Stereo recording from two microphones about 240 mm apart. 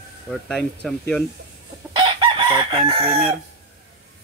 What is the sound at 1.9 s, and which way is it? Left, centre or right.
Chicken, centre.